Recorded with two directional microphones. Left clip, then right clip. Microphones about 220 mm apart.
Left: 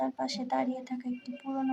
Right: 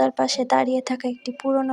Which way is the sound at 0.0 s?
40° right (ahead or behind).